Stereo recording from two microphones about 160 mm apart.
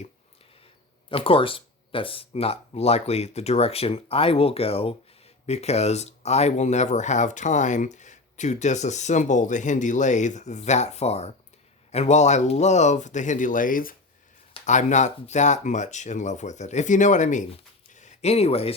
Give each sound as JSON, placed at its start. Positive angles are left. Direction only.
{"t": 1.1, "sound": "speech", "side_deg": 35}
{"t": 14.5, "sound": "speech", "side_deg": 50}
{"t": 17.9, "sound": "a sound", "side_deg": 45}